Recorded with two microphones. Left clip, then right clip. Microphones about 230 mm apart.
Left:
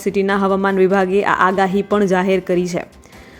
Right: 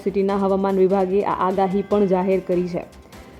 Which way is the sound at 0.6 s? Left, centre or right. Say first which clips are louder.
Left 3 dB; centre.